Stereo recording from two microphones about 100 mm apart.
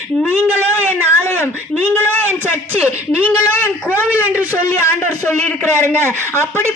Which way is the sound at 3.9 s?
20° right (ahead or behind).